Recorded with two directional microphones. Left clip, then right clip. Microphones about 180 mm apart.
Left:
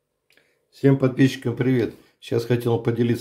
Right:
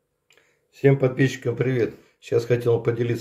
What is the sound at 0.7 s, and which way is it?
Speech, 50° left (ahead or behind).